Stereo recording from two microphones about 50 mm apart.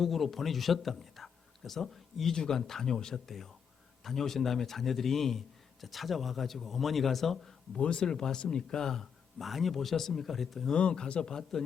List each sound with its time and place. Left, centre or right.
0.0 s a man's voice: centre
7.8 s speech: left
9.4 s a man's voice: centre
10.8 s speech: centre